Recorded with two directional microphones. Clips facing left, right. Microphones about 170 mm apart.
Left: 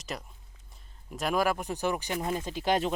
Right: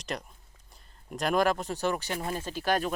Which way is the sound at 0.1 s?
Centre (ahead or behind).